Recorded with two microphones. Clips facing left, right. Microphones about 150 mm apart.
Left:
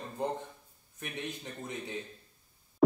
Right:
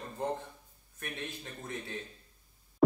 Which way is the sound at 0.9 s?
20° left (ahead or behind).